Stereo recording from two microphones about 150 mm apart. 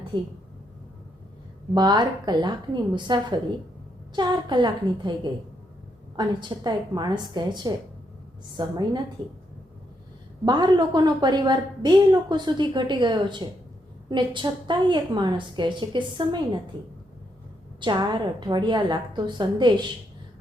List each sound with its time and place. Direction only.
0.1 s a woman's voice: 30° right (ahead or behind)
1.7 s a woman's voice: 30° right (ahead or behind)
10.4 s a woman's voice: 30° right (ahead or behind)
17.7 s a woman's voice: 30° right (ahead or behind)